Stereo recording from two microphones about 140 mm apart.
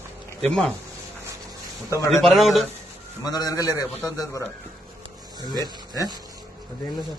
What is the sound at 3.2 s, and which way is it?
A man's voice, 30° left (ahead or behind).